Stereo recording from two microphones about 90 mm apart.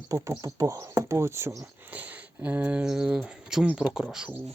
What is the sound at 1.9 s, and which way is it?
Speech, 15° right (ahead or behind).